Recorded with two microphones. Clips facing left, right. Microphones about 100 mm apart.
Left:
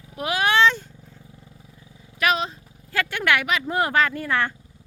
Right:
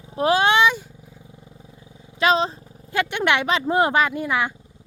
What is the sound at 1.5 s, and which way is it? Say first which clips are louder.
Wild animals: right 3 dB; 25° right (ahead or behind).